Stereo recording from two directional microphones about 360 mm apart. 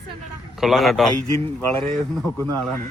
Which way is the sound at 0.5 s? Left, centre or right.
Centre.